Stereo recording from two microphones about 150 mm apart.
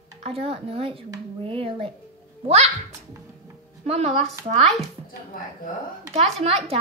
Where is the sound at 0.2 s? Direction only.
40° right (ahead or behind).